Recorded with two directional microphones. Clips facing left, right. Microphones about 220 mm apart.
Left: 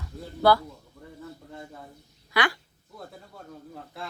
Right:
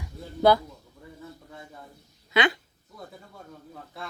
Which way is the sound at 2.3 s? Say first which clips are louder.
Right 3 dB; 20° right (ahead or behind).